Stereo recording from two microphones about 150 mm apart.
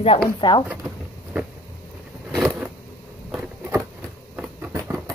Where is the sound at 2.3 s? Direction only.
Centre (ahead or behind).